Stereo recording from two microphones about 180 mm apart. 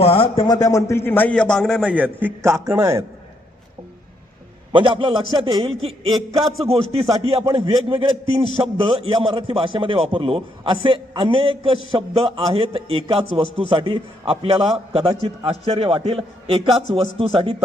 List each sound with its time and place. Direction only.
0.0 s a man's voice: 30° left (ahead or behind); by 3.0 s 15° right (ahead or behind)
4.7 s a man's voice: 30° right (ahead or behind)